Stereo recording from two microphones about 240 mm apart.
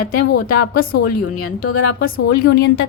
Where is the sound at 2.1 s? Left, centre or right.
Left.